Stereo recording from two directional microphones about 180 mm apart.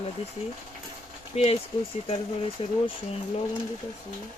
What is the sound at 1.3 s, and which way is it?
Speech, 35° left (ahead or behind).